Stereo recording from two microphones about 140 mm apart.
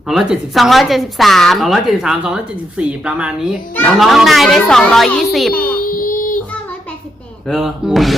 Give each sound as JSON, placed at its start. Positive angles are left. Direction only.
{"t": 0.1, "sound": "speech", "side_deg": 0}
{"t": 6.0, "sound": "child singing", "side_deg": 85}
{"t": 7.4, "sound": "speech", "side_deg": -5}